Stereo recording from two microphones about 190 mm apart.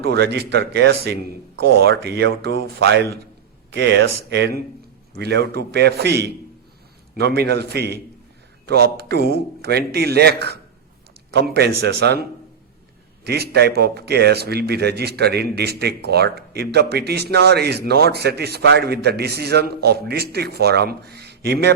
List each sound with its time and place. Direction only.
0.0 s speech: 55° right (ahead or behind)